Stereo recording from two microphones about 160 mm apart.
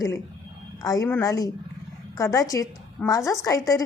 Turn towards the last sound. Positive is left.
turn(degrees=20)  # may be behind; listen again after turning